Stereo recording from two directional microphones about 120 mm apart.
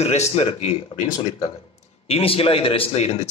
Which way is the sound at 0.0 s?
60° left (ahead or behind).